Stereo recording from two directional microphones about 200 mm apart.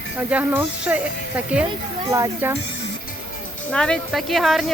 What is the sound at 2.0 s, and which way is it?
Speech, 15° right (ahead or behind).